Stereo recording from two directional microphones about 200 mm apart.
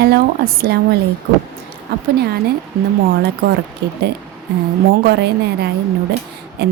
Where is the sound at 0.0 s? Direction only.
50° right (ahead or behind).